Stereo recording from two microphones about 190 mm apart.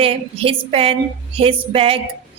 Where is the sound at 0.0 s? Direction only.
30° right (ahead or behind).